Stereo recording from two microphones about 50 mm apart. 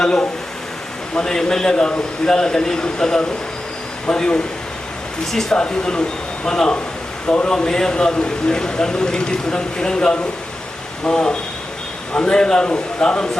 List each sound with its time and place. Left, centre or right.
1.1 s speech: centre
5.2 s speech: centre
5.5 s speech: centre